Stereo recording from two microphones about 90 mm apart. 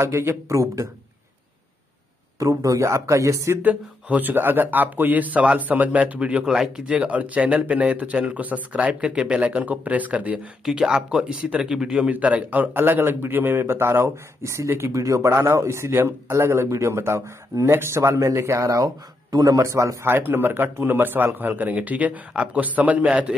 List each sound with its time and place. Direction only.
0.0 s speech: 25° right (ahead or behind)
2.3 s speech: 40° right (ahead or behind)
3.6 s a man's voice: 20° right (ahead or behind)